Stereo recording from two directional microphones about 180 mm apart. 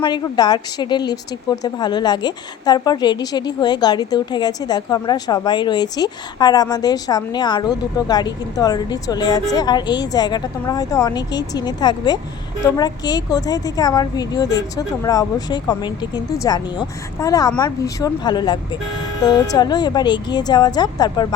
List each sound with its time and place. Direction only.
0.0 s a woman's voice: 25° left (ahead or behind)